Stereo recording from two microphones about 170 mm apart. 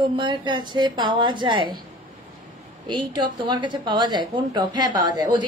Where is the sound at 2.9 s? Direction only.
25° right (ahead or behind).